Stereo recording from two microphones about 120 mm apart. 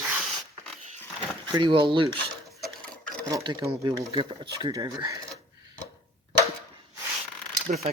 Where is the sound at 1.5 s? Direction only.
40° right (ahead or behind).